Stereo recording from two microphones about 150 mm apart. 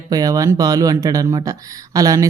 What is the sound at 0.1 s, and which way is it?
Speech, 25° right (ahead or behind).